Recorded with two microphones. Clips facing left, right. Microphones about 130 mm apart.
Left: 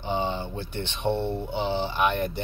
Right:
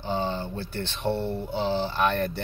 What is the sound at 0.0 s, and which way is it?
Speech, 20° left (ahead or behind).